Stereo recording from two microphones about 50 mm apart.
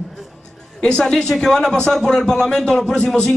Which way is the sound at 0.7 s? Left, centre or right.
Centre.